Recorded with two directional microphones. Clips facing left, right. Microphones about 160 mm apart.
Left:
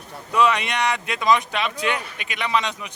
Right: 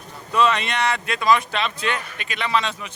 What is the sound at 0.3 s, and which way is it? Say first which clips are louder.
Speech: even; 15° left (ahead or behind).